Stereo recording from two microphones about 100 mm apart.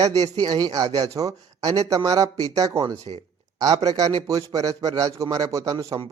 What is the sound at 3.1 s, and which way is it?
Speech, 60° right (ahead or behind).